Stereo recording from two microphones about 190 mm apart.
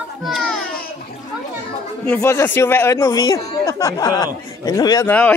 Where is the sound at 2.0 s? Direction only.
10° left (ahead or behind).